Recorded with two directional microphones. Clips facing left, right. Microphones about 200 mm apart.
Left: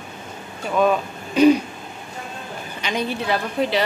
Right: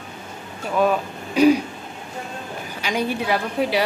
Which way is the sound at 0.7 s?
5° right (ahead or behind).